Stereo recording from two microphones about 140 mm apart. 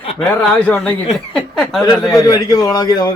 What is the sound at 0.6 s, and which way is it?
Speech, 15° left (ahead or behind).